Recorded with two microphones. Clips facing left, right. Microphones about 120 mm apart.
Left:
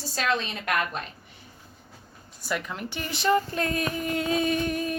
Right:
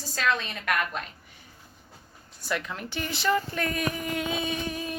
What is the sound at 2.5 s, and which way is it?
Speech, 5° left (ahead or behind).